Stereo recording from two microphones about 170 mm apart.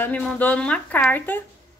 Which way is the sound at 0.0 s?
10° left (ahead or behind).